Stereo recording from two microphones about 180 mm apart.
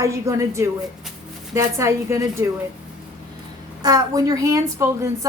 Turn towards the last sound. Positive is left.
turn(degrees=-15)  # may be behind; listen again after turning